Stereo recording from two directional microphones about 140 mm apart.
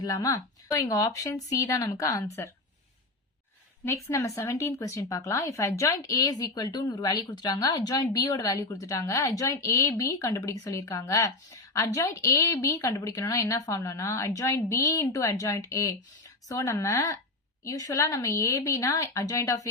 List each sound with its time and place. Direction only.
0.0 s speech: 25° left (ahead or behind)
3.8 s speech: 20° left (ahead or behind)